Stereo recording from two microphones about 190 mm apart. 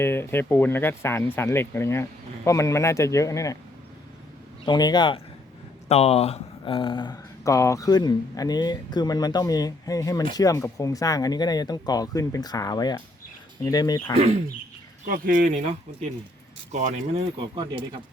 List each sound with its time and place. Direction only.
0.0 s speech: 10° left (ahead or behind)
4.6 s speech: 20° left (ahead or behind)
14.2 s speech: 35° right (ahead or behind)
15.0 s speech: 50° right (ahead or behind); by 17.8 s 25° right (ahead or behind)